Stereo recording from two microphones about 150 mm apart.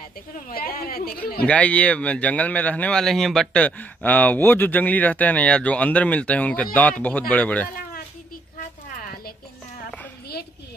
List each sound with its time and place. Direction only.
0.5 s a woman's voice: 80° left
1.4 s speech: 10° left (ahead or behind)